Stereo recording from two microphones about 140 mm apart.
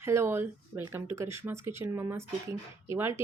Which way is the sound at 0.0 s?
20° right (ahead or behind).